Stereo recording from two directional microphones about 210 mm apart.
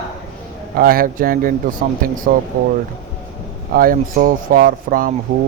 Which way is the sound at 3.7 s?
45° right (ahead or behind).